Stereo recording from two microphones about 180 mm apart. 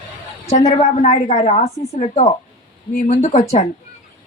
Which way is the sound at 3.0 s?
35° left (ahead or behind).